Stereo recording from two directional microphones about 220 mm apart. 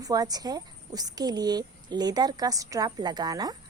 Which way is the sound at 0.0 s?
15° right (ahead or behind).